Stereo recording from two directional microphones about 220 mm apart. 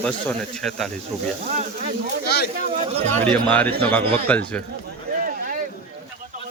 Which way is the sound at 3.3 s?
5° left (ahead or behind).